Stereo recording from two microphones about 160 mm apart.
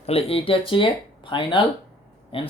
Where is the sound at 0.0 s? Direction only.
40° left (ahead or behind).